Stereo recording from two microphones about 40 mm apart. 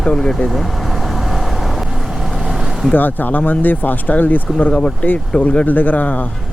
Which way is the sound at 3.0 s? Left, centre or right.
Left.